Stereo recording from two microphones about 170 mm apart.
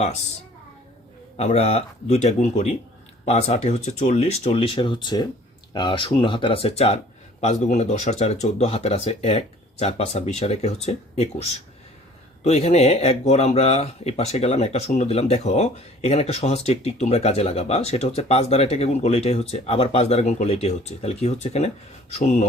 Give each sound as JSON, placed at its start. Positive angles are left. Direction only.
{"t": 1.4, "sound": "speech", "side_deg": 40}